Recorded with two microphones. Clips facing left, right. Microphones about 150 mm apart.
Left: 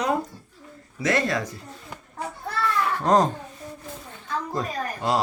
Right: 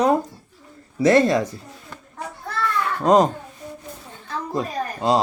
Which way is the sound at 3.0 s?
15° right (ahead or behind).